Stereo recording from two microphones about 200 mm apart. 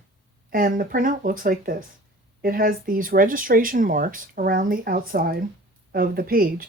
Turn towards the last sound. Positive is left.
turn(degrees=-45)  # may be behind; listen again after turning